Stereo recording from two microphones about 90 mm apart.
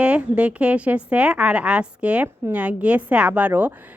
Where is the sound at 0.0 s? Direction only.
15° right (ahead or behind).